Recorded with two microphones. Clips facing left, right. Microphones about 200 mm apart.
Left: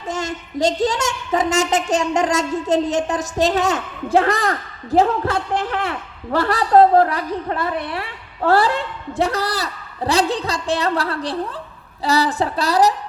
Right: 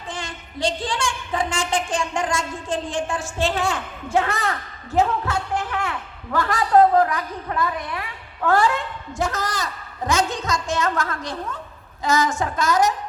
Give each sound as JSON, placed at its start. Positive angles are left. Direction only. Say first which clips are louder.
{"t": 0.1, "sound": "a woman's voice", "louder": "left 9 dB", "side_deg": 45}